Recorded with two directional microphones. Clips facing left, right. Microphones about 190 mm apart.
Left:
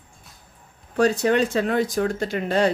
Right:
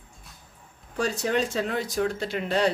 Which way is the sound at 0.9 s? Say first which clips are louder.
Left 7 dB; 60° left (ahead or behind).